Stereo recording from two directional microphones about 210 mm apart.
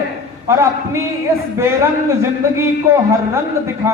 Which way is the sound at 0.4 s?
15° right (ahead or behind).